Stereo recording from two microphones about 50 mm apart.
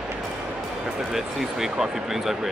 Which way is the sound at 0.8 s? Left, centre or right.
Centre.